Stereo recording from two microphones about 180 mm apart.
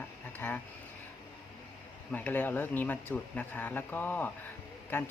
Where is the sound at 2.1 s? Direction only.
10° left (ahead or behind).